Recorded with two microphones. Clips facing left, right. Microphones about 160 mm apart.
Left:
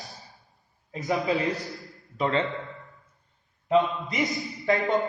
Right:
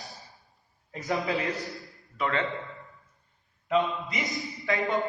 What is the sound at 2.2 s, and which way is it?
Speech, 25° left (ahead or behind).